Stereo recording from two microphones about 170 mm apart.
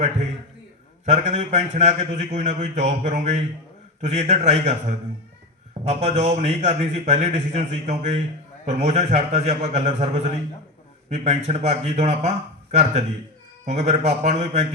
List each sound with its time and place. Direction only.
1.0 s a man's voice: 45° right (ahead or behind)